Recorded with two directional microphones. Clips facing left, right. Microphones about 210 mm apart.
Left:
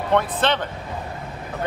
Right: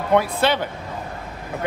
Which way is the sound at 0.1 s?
10° right (ahead or behind).